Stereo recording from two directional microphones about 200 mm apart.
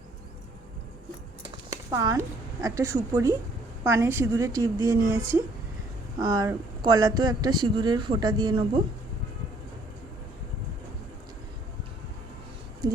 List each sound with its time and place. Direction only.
1.7 s a woman's voice: 15° right (ahead or behind)
6.1 s speech: 20° right (ahead or behind)